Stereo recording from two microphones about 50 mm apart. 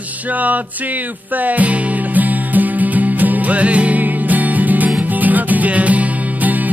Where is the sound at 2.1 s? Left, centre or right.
Right.